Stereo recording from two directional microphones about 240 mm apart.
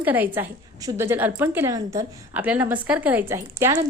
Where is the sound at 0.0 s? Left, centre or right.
Centre.